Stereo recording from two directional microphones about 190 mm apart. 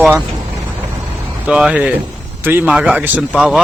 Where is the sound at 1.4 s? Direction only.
5° right (ahead or behind).